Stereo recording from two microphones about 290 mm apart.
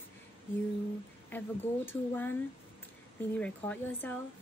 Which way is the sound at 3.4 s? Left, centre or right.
Centre.